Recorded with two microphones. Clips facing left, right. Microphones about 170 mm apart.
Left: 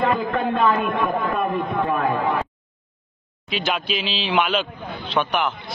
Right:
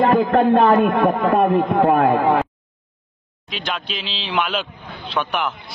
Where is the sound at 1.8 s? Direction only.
70° right (ahead or behind).